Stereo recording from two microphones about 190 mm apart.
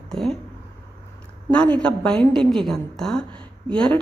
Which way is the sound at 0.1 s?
Centre (ahead or behind).